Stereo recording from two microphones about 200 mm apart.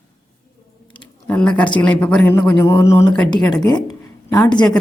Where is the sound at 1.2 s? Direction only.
5° left (ahead or behind).